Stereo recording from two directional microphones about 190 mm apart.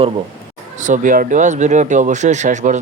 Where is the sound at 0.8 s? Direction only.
40° right (ahead or behind).